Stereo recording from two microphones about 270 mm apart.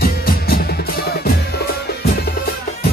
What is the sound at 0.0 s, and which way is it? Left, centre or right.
Music, left.